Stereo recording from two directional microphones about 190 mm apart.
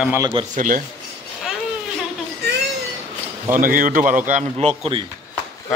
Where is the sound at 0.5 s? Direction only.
45° right (ahead or behind).